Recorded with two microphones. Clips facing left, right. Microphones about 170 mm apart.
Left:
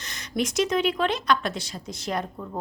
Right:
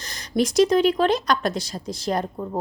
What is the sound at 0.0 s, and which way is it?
Speech, 35° right (ahead or behind).